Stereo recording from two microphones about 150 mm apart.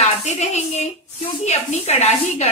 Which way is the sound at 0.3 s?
50° left (ahead or behind).